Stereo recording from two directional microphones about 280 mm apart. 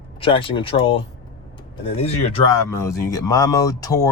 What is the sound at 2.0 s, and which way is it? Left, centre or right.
Speech, left.